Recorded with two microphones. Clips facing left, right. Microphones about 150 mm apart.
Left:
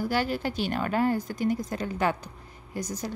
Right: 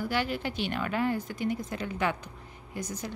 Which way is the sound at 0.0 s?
40° left (ahead or behind).